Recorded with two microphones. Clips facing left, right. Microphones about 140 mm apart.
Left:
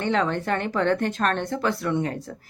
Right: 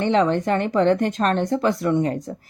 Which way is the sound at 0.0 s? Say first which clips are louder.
Right 5 dB; 20° right (ahead or behind).